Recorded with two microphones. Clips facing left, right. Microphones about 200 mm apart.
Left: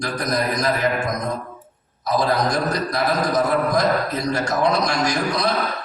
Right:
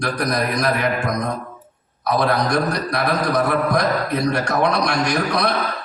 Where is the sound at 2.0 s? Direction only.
60° right (ahead or behind).